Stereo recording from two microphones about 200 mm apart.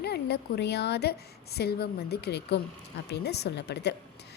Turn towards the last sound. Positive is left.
turn(degrees=55)  # may be behind; listen again after turning